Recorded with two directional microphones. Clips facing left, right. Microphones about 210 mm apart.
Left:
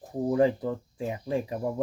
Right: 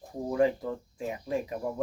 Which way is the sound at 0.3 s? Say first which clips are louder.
Left 2 dB; 30° left (ahead or behind).